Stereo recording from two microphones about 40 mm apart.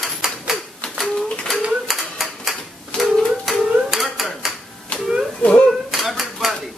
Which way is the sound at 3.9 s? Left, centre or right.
Centre.